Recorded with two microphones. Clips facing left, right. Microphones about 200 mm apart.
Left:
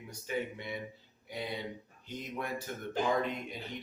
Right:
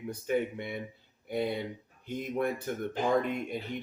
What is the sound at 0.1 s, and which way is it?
Speech, 55° right (ahead or behind).